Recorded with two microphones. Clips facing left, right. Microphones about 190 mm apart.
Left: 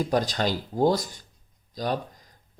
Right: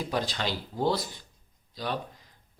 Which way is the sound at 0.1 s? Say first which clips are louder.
Left 6 dB; 45° left (ahead or behind).